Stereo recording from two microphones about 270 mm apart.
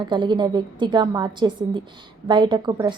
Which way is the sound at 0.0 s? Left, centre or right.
Centre.